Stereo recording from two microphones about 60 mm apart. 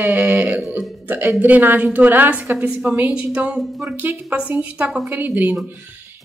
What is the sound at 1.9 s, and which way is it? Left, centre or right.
A woman's voice, right.